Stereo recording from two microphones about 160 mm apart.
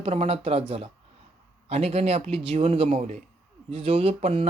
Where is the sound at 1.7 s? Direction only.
40° right (ahead or behind).